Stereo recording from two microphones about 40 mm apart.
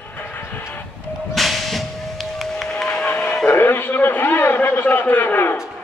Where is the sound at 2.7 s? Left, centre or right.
Left.